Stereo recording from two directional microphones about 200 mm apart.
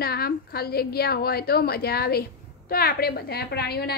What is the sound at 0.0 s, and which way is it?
A woman's voice, 50° left (ahead or behind).